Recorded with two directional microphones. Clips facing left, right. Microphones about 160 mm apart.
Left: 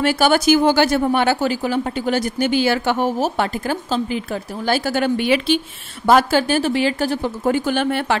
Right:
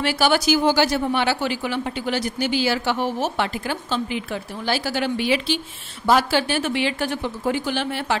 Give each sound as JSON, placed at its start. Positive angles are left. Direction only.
{"t": 0.0, "sound": "speech", "side_deg": 50}